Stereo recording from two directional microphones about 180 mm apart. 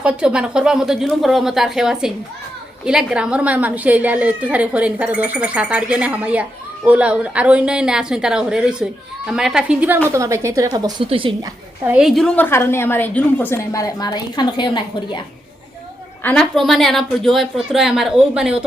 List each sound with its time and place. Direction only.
0.0 s a woman's voice: 5° right (ahead or behind); by 11.3 s 30° right (ahead or behind)
11.9 s a woman's voice: 5° right (ahead or behind); by 15.2 s 25° left (ahead or behind)
16.2 s a woman's voice: 5° left (ahead or behind)